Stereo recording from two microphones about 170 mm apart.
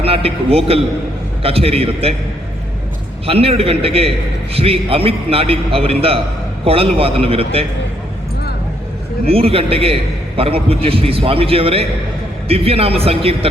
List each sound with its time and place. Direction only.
0.0 s a man's voice: 35° right (ahead or behind)
3.2 s a man's voice: 35° right (ahead or behind)
9.2 s a man's voice: 35° right (ahead or behind)